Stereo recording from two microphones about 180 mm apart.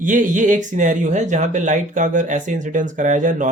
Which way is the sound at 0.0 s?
45° right (ahead or behind).